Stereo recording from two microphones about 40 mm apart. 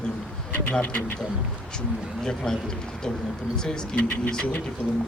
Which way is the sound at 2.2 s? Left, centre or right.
Centre.